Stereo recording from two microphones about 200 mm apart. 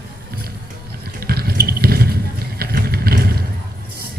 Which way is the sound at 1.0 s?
50° right (ahead or behind).